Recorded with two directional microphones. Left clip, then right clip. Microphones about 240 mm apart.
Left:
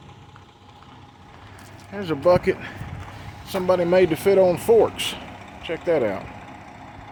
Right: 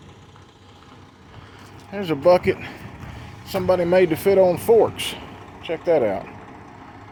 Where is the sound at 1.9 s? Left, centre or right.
Centre.